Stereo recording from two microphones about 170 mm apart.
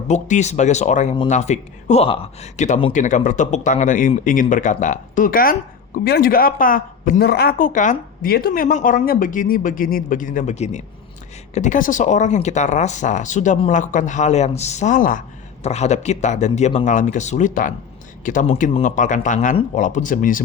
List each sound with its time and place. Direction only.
0.1 s speech: 45° left (ahead or behind)
15.6 s speech: 40° left (ahead or behind)